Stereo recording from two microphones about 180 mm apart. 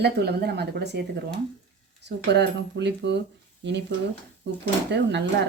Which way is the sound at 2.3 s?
70° right (ahead or behind).